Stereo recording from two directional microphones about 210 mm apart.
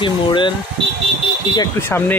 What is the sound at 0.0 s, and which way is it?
Speech, 20° left (ahead or behind).